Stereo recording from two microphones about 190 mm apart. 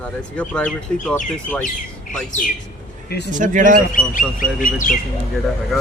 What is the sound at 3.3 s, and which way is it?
Speech, 40° right (ahead or behind).